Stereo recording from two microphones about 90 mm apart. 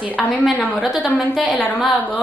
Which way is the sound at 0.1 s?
15° left (ahead or behind).